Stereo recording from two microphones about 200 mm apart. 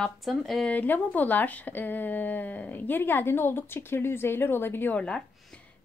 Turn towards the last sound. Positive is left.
turn(degrees=5)  # may be behind; listen again after turning